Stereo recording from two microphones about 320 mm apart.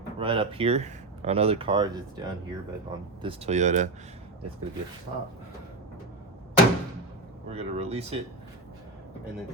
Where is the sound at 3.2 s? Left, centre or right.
Centre.